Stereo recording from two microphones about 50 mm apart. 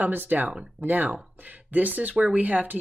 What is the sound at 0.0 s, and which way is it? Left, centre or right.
Speech, right.